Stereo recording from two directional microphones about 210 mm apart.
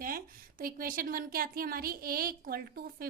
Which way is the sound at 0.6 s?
45° right (ahead or behind).